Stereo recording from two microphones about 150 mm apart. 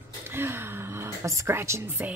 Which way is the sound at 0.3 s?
15° right (ahead or behind).